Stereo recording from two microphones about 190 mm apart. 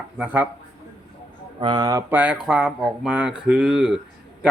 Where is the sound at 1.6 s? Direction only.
20° right (ahead or behind).